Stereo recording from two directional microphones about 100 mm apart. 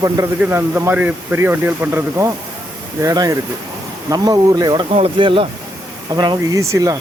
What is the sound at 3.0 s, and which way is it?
Speech, 40° right (ahead or behind).